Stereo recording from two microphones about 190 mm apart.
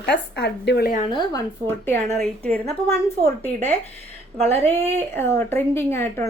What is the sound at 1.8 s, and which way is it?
Speech, 10° left (ahead or behind).